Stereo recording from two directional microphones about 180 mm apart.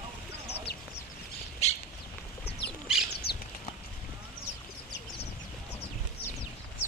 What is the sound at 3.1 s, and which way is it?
Bird flight, 65° left (ahead or behind).